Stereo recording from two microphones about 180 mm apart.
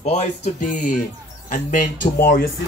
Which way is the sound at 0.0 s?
40° left (ahead or behind).